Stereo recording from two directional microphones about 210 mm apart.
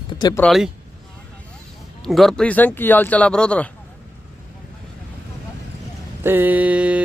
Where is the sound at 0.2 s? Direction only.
20° left (ahead or behind).